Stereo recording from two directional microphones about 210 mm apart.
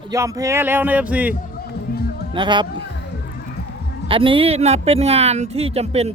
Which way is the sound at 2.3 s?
20° right (ahead or behind).